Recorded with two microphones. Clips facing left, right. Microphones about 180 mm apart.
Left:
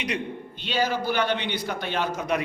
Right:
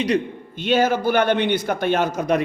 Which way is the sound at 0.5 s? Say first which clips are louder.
Right 8 dB; 50° right (ahead or behind).